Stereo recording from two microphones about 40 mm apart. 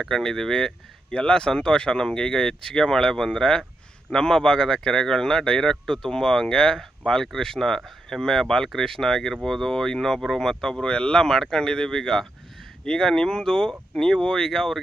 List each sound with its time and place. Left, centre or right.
0.1 s speech: centre